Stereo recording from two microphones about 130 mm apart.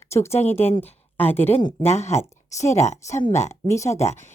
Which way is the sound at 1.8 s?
60° left (ahead or behind).